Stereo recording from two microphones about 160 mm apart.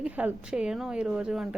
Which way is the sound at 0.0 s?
10° right (ahead or behind).